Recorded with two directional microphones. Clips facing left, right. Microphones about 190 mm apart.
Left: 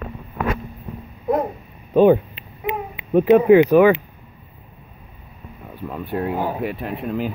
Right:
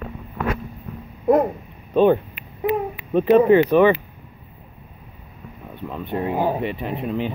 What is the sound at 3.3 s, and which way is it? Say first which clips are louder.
Speech: left 2 dB; 15° left (ahead or behind).